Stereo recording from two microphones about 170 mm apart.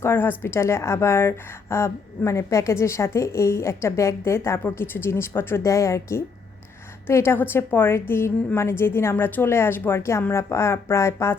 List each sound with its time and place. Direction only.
0.0 s a woman's voice: 15° left (ahead or behind)